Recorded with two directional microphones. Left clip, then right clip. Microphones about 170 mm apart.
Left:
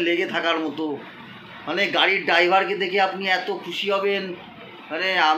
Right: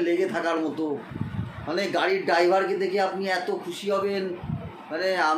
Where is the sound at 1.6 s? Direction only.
5° left (ahead or behind).